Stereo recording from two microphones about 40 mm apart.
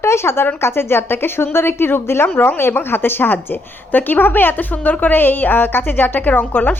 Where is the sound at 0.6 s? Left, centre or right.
Left.